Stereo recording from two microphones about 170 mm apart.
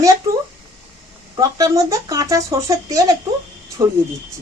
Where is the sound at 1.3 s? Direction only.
20° right (ahead or behind).